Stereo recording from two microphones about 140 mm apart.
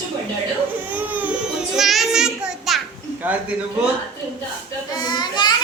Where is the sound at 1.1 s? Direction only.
10° right (ahead or behind).